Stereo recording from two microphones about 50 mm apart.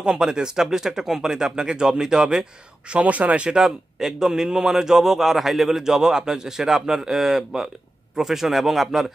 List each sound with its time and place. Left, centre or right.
0.0 s speech: centre
2.9 s speech: right
3.4 s a man's voice: centre